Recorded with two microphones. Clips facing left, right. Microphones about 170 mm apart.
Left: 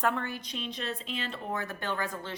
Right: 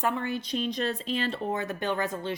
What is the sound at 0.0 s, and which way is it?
Speech, centre (ahead or behind).